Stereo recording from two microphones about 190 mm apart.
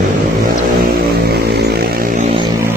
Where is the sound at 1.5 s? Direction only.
55° right (ahead or behind).